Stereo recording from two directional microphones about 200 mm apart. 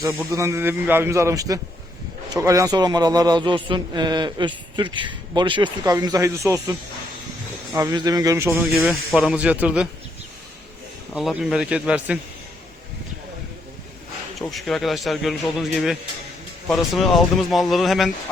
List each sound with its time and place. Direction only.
0.0 s a man's voice: 15° right (ahead or behind)
11.1 s speech: centre (ahead or behind)
14.3 s speech: centre (ahead or behind)